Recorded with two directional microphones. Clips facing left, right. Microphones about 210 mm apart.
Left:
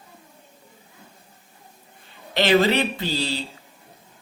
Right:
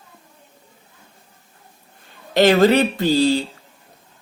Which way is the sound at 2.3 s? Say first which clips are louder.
Right 5 dB; 45° right (ahead or behind).